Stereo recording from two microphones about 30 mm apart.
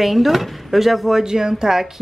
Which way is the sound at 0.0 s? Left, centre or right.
Centre.